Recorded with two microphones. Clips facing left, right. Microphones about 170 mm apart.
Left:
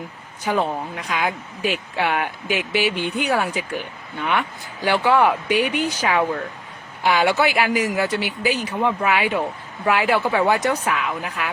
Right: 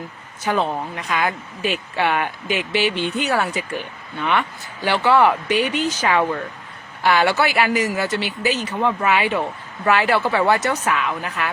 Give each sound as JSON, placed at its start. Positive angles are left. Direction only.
{"t": 0.4, "sound": "speech", "side_deg": 10}